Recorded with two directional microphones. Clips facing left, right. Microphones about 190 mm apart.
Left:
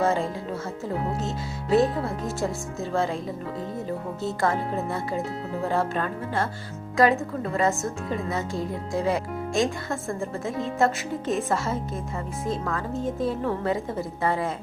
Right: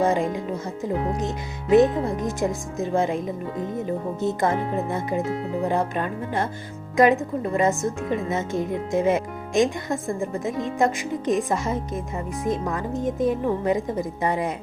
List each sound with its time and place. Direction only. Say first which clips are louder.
0.0 s a woman's voice: right 3 dB; 15° right (ahead or behind)
1.7 s a woman's voice: right 5 dB; 20° right (ahead or behind)